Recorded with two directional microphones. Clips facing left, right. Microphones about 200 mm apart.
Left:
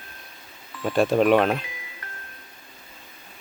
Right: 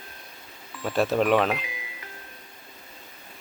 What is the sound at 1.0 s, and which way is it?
Speech, centre (ahead or behind).